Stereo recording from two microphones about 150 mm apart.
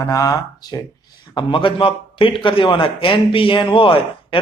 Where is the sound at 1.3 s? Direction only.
35° left (ahead or behind).